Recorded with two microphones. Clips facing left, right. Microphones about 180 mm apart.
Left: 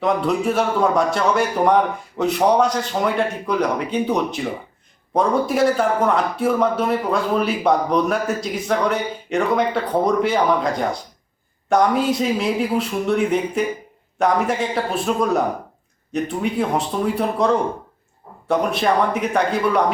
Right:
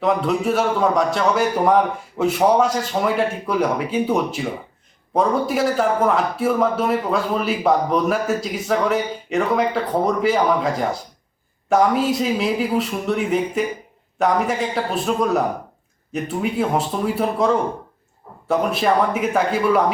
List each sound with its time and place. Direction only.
0.0 s a man's voice: centre (ahead or behind)